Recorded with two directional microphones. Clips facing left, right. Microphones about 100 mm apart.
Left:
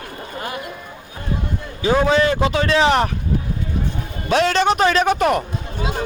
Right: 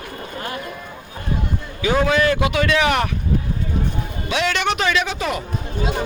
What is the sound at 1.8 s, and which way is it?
A man's voice, 30° left (ahead or behind).